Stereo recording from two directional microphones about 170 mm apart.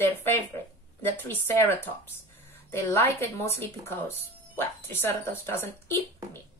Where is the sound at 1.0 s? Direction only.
10° left (ahead or behind).